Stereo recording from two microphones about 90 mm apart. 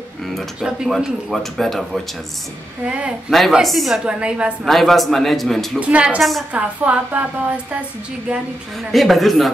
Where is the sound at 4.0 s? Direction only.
10° right (ahead or behind).